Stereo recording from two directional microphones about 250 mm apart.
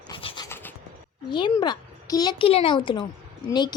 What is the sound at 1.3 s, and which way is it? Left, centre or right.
A woman's voice, centre.